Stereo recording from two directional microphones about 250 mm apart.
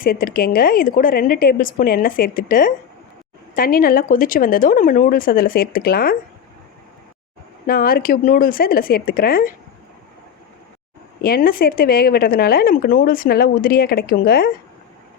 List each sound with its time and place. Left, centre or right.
0.0 s speech: left
7.7 s speech: left
11.2 s speech: left